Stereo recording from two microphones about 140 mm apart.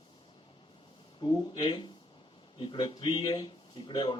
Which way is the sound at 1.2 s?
30° left (ahead or behind).